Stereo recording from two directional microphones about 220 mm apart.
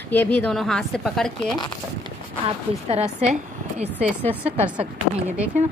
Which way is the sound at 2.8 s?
30° right (ahead or behind).